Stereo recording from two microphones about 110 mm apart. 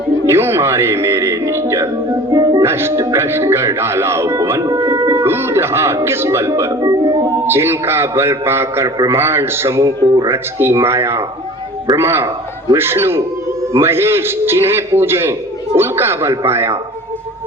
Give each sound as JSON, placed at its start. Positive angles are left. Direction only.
{"t": 0.3, "sound": "a man's voice", "side_deg": -20}
{"t": 2.3, "sound": "music", "side_deg": -35}
{"t": 2.6, "sound": "a man's voice", "side_deg": -20}
{"t": 7.4, "sound": "a man's voice", "side_deg": -20}